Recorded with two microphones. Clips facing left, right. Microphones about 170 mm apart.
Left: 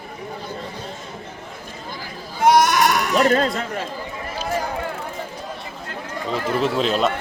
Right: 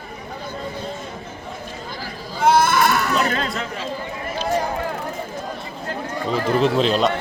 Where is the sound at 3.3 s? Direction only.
45° left (ahead or behind).